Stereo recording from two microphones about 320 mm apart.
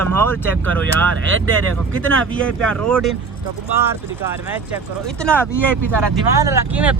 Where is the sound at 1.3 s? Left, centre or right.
Right.